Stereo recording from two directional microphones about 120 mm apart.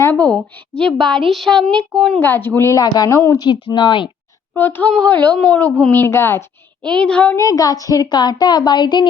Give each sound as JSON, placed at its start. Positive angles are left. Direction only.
{"t": 0.0, "sound": "a woman's voice", "side_deg": 15}
{"t": 2.1, "sound": "a woman's voice", "side_deg": 15}
{"t": 2.8, "sound": "speech", "side_deg": 35}
{"t": 3.4, "sound": "speech", "side_deg": 40}
{"t": 4.5, "sound": "a woman's voice", "side_deg": 15}
{"t": 6.8, "sound": "a woman's voice", "side_deg": 5}
{"t": 7.3, "sound": "speech", "side_deg": 30}